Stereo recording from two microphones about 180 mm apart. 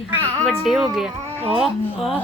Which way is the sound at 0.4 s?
Centre (ahead or behind).